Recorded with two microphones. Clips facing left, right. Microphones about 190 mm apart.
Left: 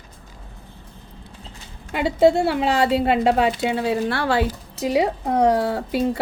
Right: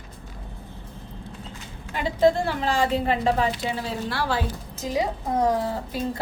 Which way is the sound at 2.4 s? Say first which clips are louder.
Left 5 dB; 75° left (ahead or behind).